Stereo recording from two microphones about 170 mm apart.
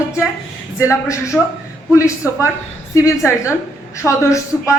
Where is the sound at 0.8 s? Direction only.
15° left (ahead or behind).